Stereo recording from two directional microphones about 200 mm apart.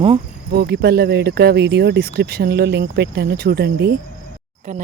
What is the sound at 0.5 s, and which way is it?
Speech, 55° right (ahead or behind).